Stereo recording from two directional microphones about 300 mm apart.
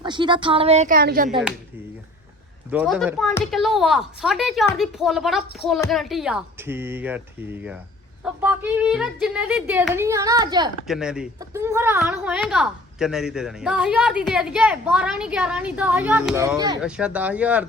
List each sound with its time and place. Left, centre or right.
0.0 s a woman's voice: centre
2.6 s a woman's voice: centre
10.8 s a woman's voice: centre